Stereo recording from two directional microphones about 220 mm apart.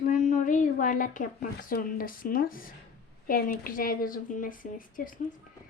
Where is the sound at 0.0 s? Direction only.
35° left (ahead or behind).